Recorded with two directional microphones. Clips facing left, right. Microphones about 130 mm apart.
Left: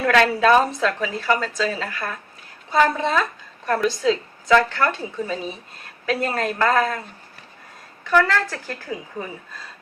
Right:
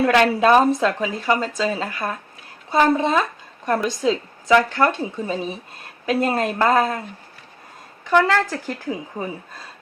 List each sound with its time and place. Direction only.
0.0 s a woman's voice: 20° right (ahead or behind)
8.0 s a woman's voice: 20° right (ahead or behind)